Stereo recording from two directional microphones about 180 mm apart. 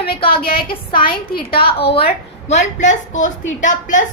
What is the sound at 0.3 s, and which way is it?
A woman's voice, 55° left (ahead or behind).